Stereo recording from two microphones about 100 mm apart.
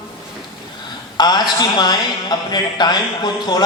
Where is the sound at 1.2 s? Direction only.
45° left (ahead or behind).